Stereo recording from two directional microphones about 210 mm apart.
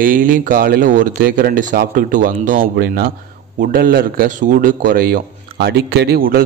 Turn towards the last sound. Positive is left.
turn(degrees=-45)  # may be behind; listen again after turning